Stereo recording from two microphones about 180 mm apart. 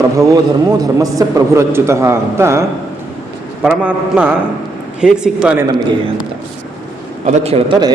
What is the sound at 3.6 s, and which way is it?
A man's voice, 5° right (ahead or behind).